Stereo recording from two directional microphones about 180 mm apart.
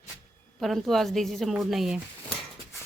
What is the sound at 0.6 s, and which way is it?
A woman's voice, centre (ahead or behind).